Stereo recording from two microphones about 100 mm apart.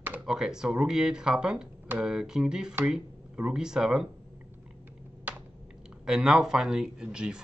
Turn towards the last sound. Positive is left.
turn(degrees=-10)  # may be behind; listen again after turning